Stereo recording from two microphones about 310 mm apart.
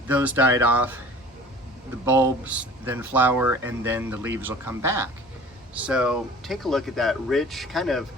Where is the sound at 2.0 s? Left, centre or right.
Centre.